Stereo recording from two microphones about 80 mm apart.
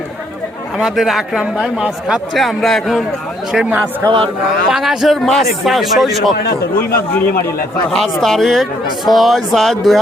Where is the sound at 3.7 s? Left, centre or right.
Right.